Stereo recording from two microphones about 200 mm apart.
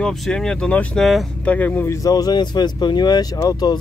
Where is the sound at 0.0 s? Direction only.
5° left (ahead or behind).